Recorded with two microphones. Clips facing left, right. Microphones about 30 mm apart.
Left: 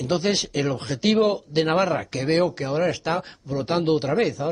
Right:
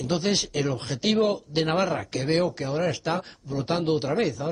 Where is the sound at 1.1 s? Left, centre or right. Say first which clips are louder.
Left 3 dB; centre.